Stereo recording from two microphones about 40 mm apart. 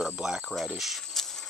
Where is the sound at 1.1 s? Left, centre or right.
Centre.